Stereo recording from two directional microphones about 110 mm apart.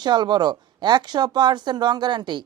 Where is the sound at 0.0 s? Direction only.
40° right (ahead or behind).